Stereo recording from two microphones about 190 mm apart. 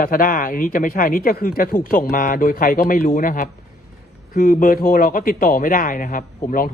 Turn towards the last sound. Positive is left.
turn(degrees=45)  # may be behind; listen again after turning